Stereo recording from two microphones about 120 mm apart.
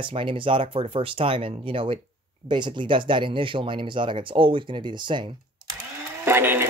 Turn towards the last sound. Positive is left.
turn(degrees=-20)  # may be behind; listen again after turning